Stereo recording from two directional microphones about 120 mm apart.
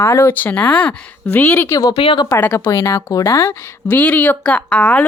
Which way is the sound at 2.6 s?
25° left (ahead or behind).